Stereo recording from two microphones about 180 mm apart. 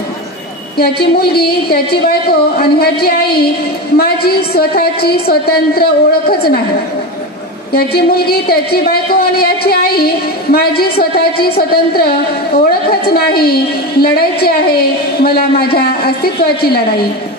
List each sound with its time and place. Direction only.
0.7 s speech: 60° left (ahead or behind)
7.7 s speech: 60° left (ahead or behind)